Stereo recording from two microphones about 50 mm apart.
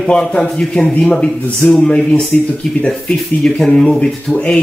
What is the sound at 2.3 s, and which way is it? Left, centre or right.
Speech, left.